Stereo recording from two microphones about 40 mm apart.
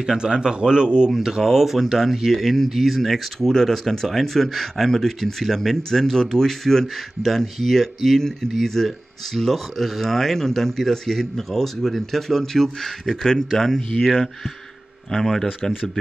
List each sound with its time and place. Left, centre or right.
0.0 s speech: centre
1.1 s speech: centre
15.0 s speech: centre